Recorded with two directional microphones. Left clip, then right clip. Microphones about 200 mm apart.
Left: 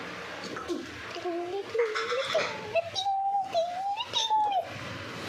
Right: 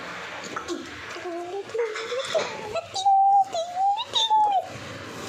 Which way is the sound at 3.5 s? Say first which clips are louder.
Right 5 dB; 10° right (ahead or behind).